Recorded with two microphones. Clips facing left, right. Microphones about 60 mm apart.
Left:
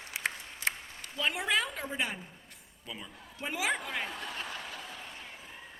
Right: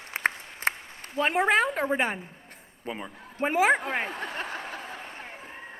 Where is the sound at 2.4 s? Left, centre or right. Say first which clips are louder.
Right 9 dB; right.